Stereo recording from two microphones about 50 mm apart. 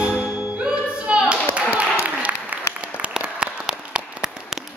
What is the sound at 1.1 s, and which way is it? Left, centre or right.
Clapping, right.